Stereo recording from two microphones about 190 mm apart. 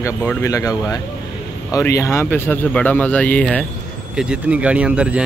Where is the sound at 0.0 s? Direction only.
10° left (ahead or behind).